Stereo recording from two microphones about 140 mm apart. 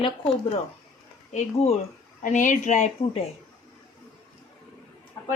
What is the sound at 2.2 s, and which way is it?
Speech, 65° left (ahead or behind).